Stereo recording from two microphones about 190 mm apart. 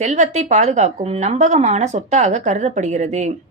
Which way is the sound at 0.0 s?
40° right (ahead or behind).